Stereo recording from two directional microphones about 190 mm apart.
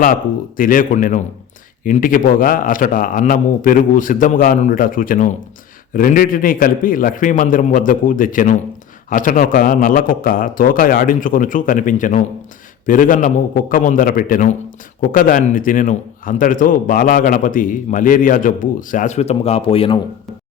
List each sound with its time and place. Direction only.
0.0 s speech: 45° left (ahead or behind); by 20.0 s 30° left (ahead or behind)